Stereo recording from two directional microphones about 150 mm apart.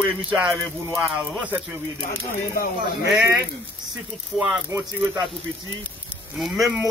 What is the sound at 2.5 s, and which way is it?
Speech, 80° left.